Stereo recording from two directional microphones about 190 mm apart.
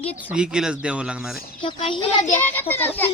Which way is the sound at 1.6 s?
25° left (ahead or behind).